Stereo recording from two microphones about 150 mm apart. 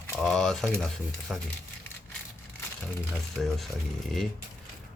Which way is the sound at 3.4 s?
Centre (ahead or behind).